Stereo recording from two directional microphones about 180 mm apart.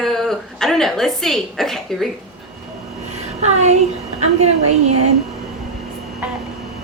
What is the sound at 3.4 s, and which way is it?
Speech, 40° right (ahead or behind).